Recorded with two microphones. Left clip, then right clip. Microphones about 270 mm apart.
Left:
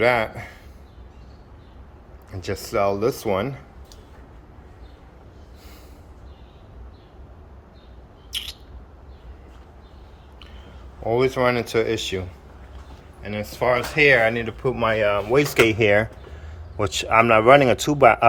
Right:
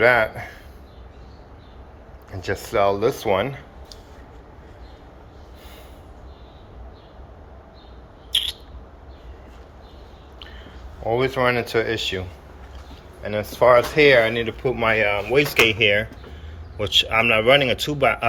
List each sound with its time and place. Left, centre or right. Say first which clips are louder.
0.0 s speech: right 3 dB; centre
2.3 s speech: right 2 dB; centre
11.0 s speech: even; centre
13.2 s speech: right 6 dB; centre